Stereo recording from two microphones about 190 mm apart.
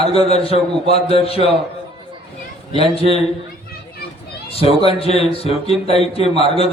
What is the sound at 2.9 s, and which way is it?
Speech, 30° left (ahead or behind).